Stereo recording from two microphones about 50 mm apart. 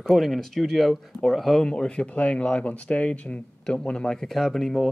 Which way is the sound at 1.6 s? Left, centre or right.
Centre.